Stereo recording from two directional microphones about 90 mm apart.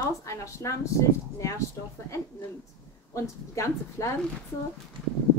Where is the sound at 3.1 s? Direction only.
35° left (ahead or behind).